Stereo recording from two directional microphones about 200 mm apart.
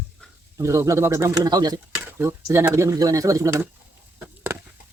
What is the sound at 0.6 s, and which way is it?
Speech, 15° right (ahead or behind).